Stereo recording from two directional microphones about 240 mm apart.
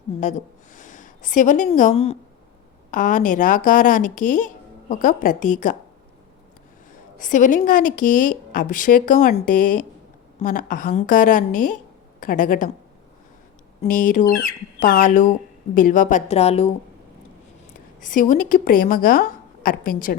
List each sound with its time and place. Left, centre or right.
0.2 s a woman's voice: left
7.2 s speech: left
13.8 s speech: left
18.0 s speech: left